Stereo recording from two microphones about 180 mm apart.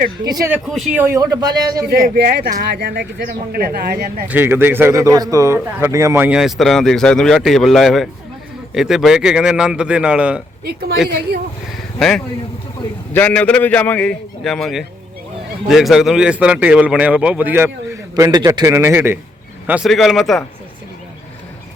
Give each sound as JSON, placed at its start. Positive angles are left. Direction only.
{"t": 0.3, "sound": "speech", "side_deg": -20}
{"t": 0.5, "sound": "speech", "side_deg": -5}
{"t": 0.9, "sound": "speech", "side_deg": -15}
{"t": 1.9, "sound": "speech", "side_deg": -60}
{"t": 4.3, "sound": "a man's voice", "side_deg": -10}
{"t": 10.7, "sound": "speech", "side_deg": -60}
{"t": 11.9, "sound": "a man's voice", "side_deg": 5}